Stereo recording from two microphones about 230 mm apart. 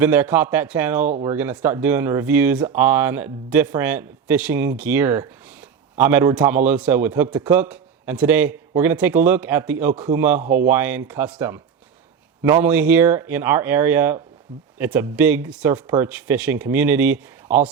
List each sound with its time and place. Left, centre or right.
0.0 s a man's voice: centre
10.4 s speech: right
10.7 s a man's voice: centre